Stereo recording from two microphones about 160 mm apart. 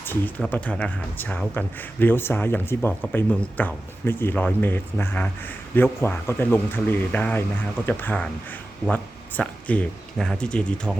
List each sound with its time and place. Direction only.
0.0 s speech: 10° left (ahead or behind)